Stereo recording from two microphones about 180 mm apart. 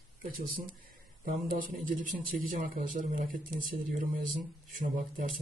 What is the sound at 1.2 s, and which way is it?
Speech, 50° right (ahead or behind).